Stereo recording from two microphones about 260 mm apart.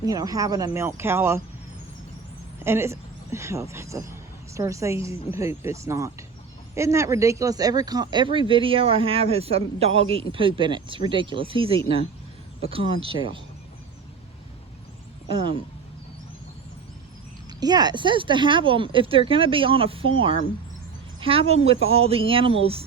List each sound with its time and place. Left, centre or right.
0.0 s speech: centre
2.6 s speech: centre
17.6 s speech: centre